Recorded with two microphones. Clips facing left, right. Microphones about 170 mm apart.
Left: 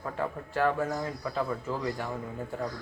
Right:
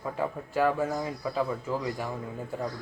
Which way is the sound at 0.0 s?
10° right (ahead or behind).